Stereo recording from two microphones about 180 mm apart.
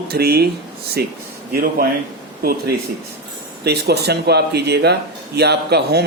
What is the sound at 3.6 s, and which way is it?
Speech, 65° right (ahead or behind).